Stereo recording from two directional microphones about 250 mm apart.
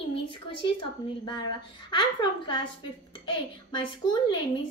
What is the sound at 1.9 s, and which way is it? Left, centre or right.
A woman's voice, centre.